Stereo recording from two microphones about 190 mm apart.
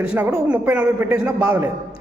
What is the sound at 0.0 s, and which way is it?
A woman's voice, 5° right (ahead or behind).